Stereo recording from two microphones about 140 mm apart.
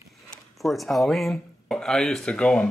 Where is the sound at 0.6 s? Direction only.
Centre (ahead or behind).